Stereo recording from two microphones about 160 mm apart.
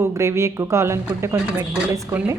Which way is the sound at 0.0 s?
15° right (ahead or behind).